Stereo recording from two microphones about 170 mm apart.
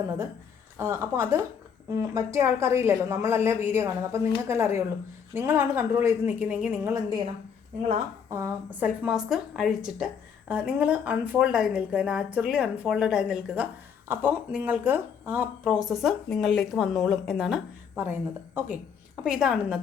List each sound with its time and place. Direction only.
0.8 s a woman's voice: 15° right (ahead or behind)
8.3 s a woman's voice: 15° right (ahead or behind)
9.0 s a woman's voice: centre (ahead or behind)